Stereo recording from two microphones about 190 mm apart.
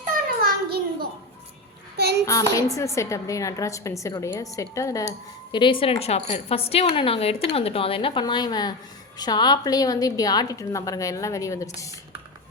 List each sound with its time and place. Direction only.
0.4 s a sound: 55° right (ahead or behind)
2.0 s child singing: 60° right (ahead or behind)
2.2 s a woman's voice: 15° left (ahead or behind)